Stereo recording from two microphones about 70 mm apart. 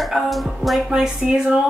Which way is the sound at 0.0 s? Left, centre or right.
Centre.